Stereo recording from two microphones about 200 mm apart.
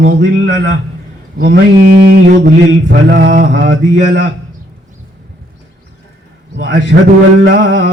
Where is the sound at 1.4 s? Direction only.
50° right (ahead or behind).